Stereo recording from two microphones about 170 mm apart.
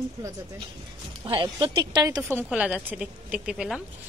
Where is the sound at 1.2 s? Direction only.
30° right (ahead or behind).